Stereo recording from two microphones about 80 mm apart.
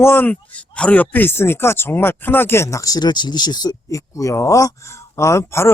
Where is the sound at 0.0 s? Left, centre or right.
Left.